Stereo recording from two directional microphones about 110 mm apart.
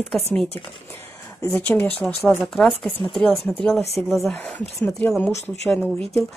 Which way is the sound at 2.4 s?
Centre (ahead or behind).